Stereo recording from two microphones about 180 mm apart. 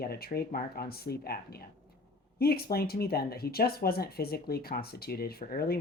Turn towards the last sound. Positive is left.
turn(degrees=60)  # may be behind; listen again after turning